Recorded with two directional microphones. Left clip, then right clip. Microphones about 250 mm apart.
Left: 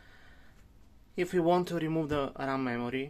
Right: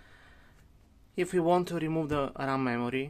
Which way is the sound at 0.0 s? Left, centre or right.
Centre.